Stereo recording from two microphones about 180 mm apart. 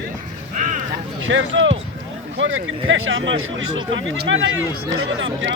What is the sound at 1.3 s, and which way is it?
Speech, 90° right.